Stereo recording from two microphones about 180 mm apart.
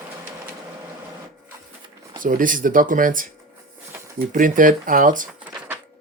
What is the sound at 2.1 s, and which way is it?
Speech, 45° right (ahead or behind).